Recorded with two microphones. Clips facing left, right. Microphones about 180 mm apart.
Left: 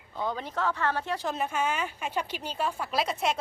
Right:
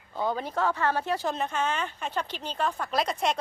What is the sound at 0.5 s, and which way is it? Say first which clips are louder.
Speech: right 2 dB; 45° right (ahead or behind).